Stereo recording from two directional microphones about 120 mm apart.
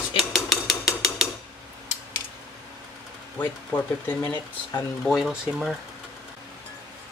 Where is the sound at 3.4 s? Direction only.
15° left (ahead or behind).